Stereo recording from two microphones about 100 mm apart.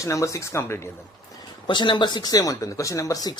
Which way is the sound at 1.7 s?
55° left (ahead or behind).